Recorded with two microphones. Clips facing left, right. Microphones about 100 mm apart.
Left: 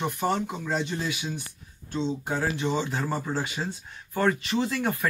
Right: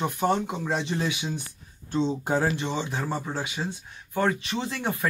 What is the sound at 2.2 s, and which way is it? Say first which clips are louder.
Speech: right 4 dB; 35° right (ahead or behind).